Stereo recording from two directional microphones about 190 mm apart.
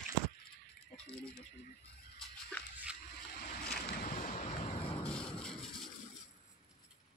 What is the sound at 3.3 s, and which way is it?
Boat, 50° left (ahead or behind).